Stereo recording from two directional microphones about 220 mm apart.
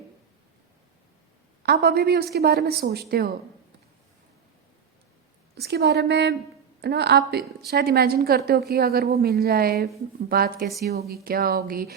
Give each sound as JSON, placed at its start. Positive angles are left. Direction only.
{"t": 1.6, "sound": "a woman's voice", "side_deg": -45}
{"t": 5.5, "sound": "a woman's voice", "side_deg": -50}